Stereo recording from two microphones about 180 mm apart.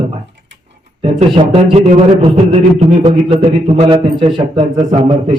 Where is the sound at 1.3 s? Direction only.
35° right (ahead or behind).